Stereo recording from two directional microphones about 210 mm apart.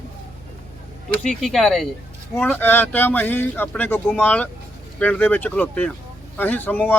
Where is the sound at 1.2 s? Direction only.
Centre (ahead or behind).